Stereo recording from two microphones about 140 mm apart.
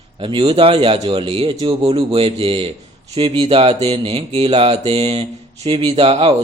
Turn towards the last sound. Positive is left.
turn(degrees=-45)  # may be behind; listen again after turning